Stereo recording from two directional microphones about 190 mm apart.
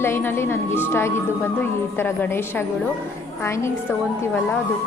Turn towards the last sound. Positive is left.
turn(degrees=15)  # may be behind; listen again after turning